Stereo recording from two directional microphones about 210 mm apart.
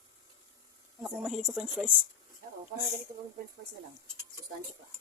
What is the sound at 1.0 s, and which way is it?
Speech, centre (ahead or behind).